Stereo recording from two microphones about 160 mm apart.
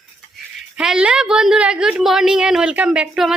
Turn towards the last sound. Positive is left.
turn(degrees=-5)  # may be behind; listen again after turning